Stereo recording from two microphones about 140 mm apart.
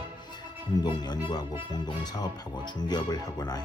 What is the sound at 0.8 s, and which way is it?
Speech, 30° left (ahead or behind).